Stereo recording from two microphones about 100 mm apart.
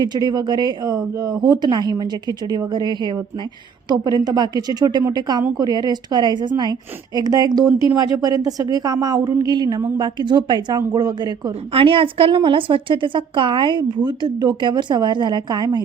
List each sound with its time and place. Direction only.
0.0 s a woman's voice: 45° right (ahead or behind)
11.7 s a woman's voice: 65° right (ahead or behind); by 15.8 s 45° right (ahead or behind)